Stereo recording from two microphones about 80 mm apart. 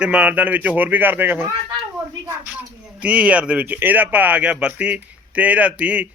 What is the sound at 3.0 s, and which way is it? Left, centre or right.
A man's voice, centre.